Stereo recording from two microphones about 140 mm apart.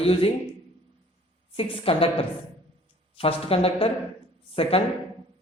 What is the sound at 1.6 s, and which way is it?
Speech, 40° left (ahead or behind).